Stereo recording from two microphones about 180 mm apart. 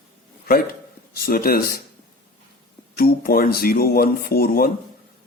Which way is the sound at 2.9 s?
55° left (ahead or behind).